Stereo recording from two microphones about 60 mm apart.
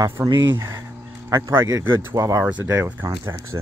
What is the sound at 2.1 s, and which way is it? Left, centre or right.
Speech, right.